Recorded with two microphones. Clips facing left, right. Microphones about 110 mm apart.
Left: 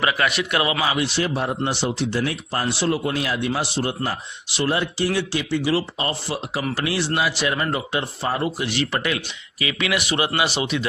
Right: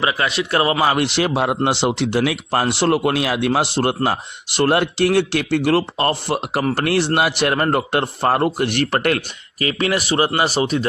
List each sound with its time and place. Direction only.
0.0 s a man's voice: 25° right (ahead or behind)
0.9 s speech: 65° right (ahead or behind); by 10.8 s 40° right (ahead or behind)